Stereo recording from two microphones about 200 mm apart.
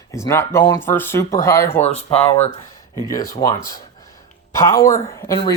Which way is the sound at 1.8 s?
30° left (ahead or behind).